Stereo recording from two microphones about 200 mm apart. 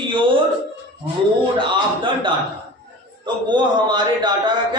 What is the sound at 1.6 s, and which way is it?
Speech, 25° right (ahead or behind).